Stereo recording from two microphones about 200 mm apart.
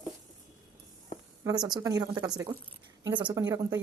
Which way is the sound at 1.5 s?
20° right (ahead or behind).